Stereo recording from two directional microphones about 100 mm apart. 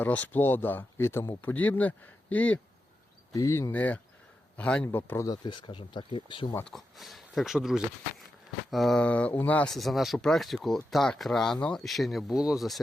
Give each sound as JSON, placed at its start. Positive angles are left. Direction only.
{"t": 0.0, "sound": "speech", "side_deg": 15}
{"t": 3.3, "sound": "speech", "side_deg": 30}
{"t": 3.7, "sound": "speech", "side_deg": 15}
{"t": 5.5, "sound": "speech", "side_deg": 55}
{"t": 6.7, "sound": "speech", "side_deg": 0}
{"t": 9.0, "sound": "speech", "side_deg": 15}
{"t": 9.6, "sound": "speech", "side_deg": 0}